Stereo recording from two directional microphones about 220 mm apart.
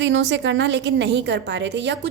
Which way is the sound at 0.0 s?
55° right (ahead or behind).